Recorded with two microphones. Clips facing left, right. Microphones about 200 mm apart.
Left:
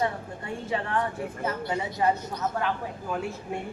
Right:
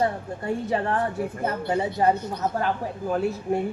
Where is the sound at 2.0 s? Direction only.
35° right (ahead or behind).